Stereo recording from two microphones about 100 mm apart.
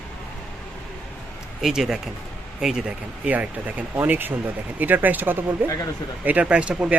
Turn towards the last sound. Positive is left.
turn(degrees=-10)  # may be behind; listen again after turning